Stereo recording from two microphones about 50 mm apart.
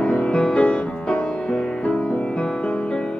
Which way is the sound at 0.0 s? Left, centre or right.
Left.